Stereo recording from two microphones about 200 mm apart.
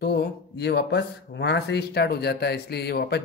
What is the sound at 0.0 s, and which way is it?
A man's voice, 55° left (ahead or behind).